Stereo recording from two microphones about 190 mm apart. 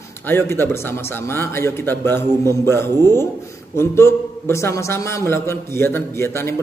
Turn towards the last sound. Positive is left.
turn(degrees=15)  # may be behind; listen again after turning